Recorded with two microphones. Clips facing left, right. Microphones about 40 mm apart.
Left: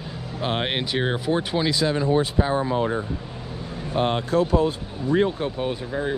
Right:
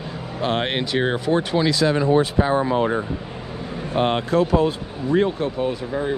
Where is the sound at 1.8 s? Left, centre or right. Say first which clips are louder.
Right 4 dB; right.